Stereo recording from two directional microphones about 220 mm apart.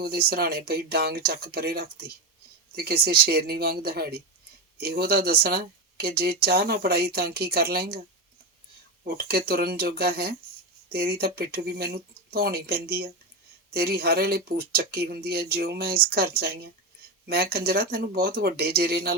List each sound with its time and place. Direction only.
0.0 s speech: 45° right (ahead or behind)
9.0 s speech: 45° right (ahead or behind)